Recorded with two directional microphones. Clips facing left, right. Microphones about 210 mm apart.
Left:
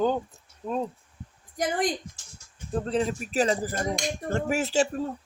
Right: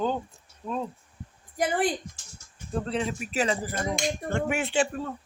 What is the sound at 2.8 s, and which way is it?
Speech, 40° left (ahead or behind).